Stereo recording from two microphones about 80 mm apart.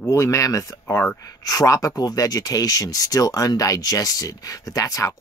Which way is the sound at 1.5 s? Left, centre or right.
Left.